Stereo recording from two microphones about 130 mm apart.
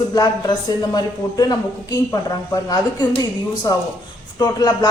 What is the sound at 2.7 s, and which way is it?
Speech, 30° left (ahead or behind).